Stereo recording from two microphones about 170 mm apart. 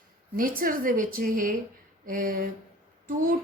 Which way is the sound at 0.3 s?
55° right (ahead or behind).